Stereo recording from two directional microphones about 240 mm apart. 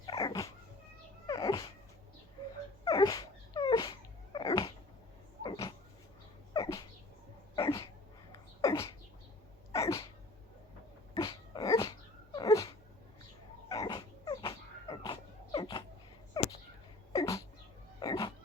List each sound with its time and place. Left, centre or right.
0.0 s dog: centre
1.3 s cat: centre
2.8 s dog: centre
5.4 s a sound: centre
6.5 s dog: centre
8.3 s a sound: centre
9.7 s sneeze: centre
11.2 s dog: centre
13.7 s dog: centre
17.1 s a sound: centre